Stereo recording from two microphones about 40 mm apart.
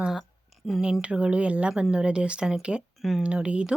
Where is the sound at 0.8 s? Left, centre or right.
Right.